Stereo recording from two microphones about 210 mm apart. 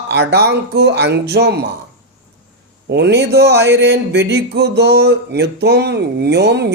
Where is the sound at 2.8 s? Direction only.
50° right (ahead or behind).